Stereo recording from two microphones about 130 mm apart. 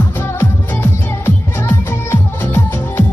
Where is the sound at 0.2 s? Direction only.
20° left (ahead or behind).